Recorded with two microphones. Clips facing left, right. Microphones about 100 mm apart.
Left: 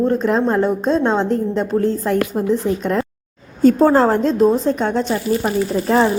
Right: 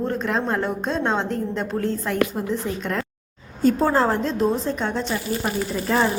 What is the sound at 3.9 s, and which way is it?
Speech, 35° left (ahead or behind).